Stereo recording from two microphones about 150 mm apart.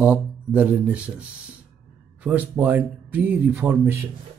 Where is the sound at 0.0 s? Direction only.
10° right (ahead or behind).